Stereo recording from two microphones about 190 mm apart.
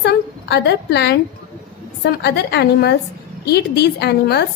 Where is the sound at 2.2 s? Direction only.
60° left (ahead or behind).